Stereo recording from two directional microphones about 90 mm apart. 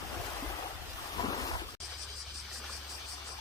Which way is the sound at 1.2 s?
40° left (ahead or behind).